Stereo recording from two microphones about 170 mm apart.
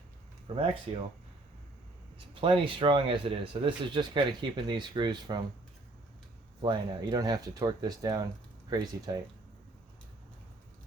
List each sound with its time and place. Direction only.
0.4 s speech: 30° right (ahead or behind)
2.1 s speech: 30° right (ahead or behind)
6.6 s speech: 25° right (ahead or behind)